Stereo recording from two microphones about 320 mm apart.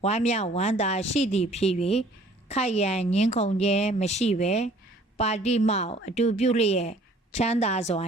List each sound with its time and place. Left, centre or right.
0.0 s a woman's voice: centre